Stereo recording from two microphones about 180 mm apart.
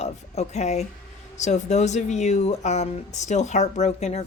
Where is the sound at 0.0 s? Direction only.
40° left (ahead or behind).